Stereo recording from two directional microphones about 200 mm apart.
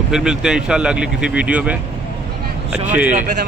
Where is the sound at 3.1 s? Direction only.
40° right (ahead or behind).